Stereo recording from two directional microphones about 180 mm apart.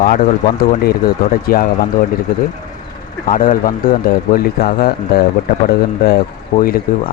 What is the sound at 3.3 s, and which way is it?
Speech, 50° left (ahead or behind).